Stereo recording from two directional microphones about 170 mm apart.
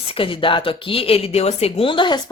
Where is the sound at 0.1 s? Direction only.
30° left (ahead or behind).